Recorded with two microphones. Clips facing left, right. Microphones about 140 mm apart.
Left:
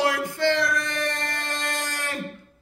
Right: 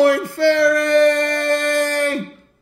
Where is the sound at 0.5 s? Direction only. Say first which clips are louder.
Right 12 dB; 70° right (ahead or behind).